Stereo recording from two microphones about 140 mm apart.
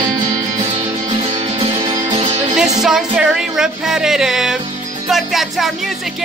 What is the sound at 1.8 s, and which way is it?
Music, 25° right (ahead or behind).